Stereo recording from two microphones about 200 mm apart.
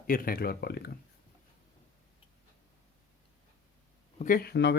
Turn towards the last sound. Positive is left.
turn(degrees=60)  # may be behind; listen again after turning